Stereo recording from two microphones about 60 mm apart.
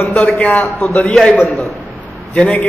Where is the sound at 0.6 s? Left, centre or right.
Centre.